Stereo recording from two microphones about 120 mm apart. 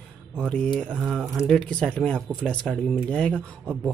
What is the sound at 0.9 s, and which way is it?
A man's voice, 5° right (ahead or behind).